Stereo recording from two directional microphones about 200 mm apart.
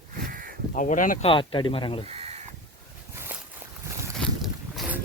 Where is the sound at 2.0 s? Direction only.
30° right (ahead or behind).